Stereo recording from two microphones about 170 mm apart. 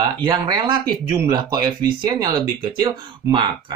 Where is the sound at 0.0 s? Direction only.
25° right (ahead or behind).